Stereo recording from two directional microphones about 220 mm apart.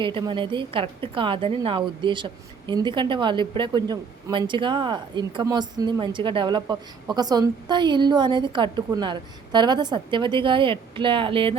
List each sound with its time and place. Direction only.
0.0 s a woman's voice: 20° right (ahead or behind)